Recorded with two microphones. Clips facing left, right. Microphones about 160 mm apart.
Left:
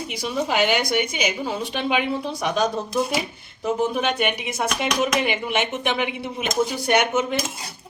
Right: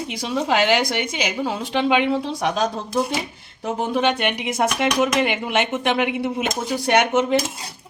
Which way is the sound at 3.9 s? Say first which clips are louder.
Right 3 dB; 90° right.